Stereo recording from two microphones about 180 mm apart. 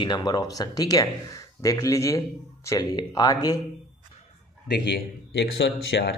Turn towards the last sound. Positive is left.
turn(degrees=70)  # may be behind; listen again after turning